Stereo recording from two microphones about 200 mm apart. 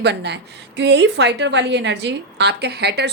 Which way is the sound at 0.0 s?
55° right (ahead or behind).